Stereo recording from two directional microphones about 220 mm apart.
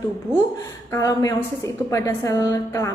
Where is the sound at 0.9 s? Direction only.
15° left (ahead or behind).